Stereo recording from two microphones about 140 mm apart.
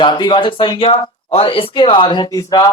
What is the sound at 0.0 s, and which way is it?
Speech, 30° left (ahead or behind).